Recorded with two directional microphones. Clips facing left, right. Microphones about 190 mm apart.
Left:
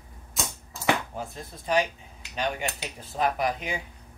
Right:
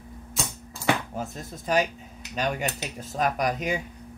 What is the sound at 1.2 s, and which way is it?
Chopping, 45° right (ahead or behind).